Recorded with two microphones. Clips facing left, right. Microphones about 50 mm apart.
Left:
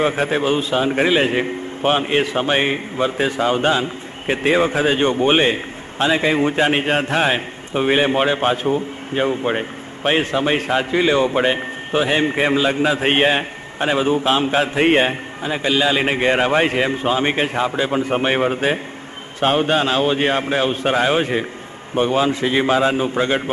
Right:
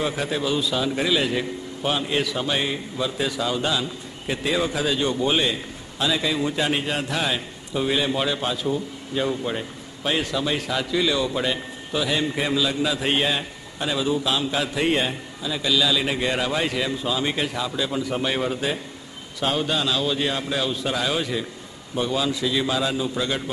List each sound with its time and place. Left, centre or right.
0.0 s a man's voice: left